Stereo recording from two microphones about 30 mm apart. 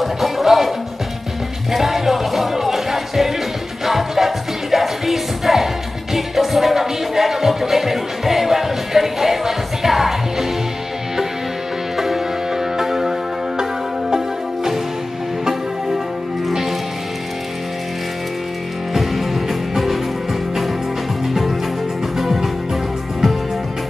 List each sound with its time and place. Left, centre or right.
0.0 s music: centre
12.0 s music: centre
14.1 s music: centre
19.7 s music: centre
21.3 s music: centre